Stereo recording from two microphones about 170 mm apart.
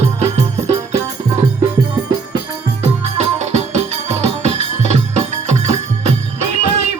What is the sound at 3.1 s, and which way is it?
Music, 40° right (ahead or behind).